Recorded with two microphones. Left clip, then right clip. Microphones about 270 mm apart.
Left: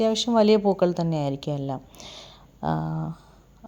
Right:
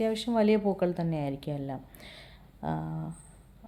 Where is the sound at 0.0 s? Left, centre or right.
Left.